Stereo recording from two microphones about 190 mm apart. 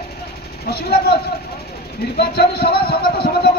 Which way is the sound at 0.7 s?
55° left (ahead or behind).